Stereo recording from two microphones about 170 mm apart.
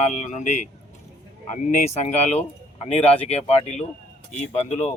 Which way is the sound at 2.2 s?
40° left (ahead or behind).